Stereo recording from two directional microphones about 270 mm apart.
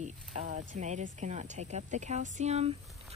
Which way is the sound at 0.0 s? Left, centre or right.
Right.